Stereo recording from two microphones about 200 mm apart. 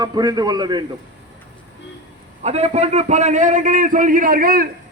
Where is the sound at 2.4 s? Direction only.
35° right (ahead or behind).